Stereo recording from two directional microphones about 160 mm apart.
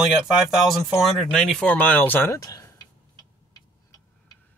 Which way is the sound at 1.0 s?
Centre (ahead or behind).